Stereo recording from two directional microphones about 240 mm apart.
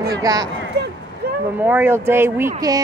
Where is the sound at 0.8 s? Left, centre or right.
Right.